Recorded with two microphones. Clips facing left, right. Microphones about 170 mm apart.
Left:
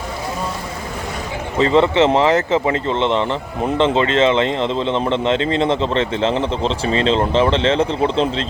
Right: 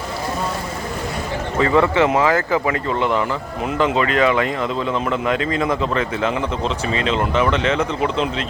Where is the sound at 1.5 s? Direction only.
25° left (ahead or behind).